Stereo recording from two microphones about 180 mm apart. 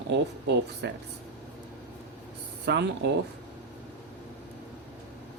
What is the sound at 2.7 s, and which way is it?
Speech, 75° right (ahead or behind).